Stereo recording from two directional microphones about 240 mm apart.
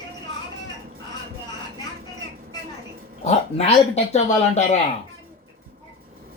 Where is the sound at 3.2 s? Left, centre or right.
Left.